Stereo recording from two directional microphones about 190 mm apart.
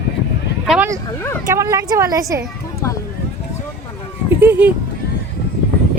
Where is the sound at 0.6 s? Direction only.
5° right (ahead or behind).